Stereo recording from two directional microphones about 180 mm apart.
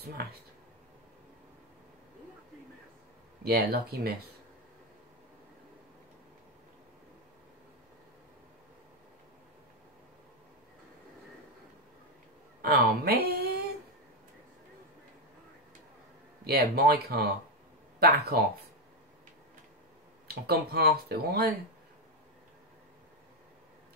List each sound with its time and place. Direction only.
0.0 s speech: 60° right (ahead or behind)
3.4 s speech: 60° right (ahead or behind)
12.6 s speech: 65° right (ahead or behind)
16.4 s speech: 60° right (ahead or behind)
20.2 s speech: 60° right (ahead or behind)